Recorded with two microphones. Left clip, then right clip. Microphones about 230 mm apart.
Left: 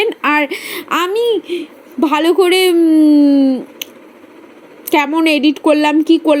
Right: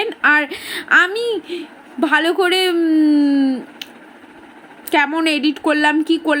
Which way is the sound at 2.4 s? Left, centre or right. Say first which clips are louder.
Left 5 dB; right.